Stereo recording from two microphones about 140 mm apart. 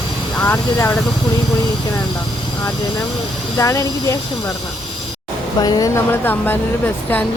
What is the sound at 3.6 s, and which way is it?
Speech, 25° left (ahead or behind).